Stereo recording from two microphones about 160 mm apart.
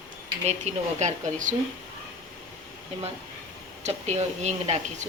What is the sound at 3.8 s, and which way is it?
Speech, 45° right (ahead or behind).